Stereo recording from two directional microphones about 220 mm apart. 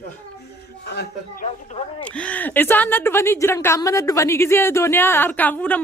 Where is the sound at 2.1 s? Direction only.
5° left (ahead or behind).